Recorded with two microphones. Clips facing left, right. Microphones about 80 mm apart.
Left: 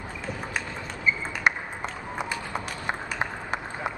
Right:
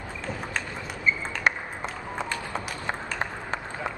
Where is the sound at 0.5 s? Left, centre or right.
Centre.